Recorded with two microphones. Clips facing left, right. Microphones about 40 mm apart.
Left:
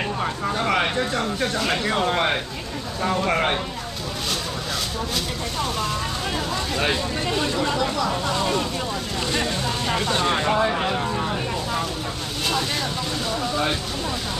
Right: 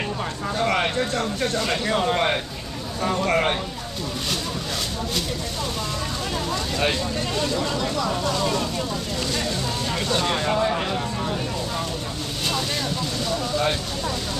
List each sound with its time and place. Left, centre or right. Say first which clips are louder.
0.2 s speech: even; centre
6.3 s speech: even; centre
9.3 s a sound: left 4 dB; left
9.9 s speech: left 1 dB; centre
13.3 s speech: right 1 dB; centre